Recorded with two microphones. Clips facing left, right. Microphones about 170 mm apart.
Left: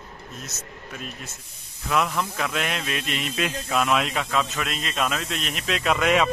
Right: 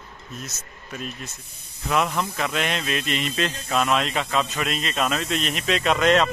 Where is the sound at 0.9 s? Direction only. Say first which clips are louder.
Right 5 dB; 5° left (ahead or behind).